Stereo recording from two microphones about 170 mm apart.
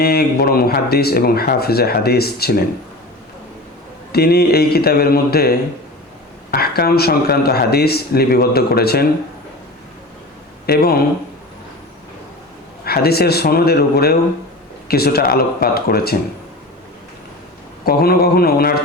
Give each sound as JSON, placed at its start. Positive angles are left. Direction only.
{"t": 0.0, "sound": "speech", "side_deg": 65}
{"t": 4.1, "sound": "speech", "side_deg": 70}
{"t": 10.7, "sound": "speech", "side_deg": 70}
{"t": 12.8, "sound": "speech", "side_deg": 65}
{"t": 17.8, "sound": "speech", "side_deg": 65}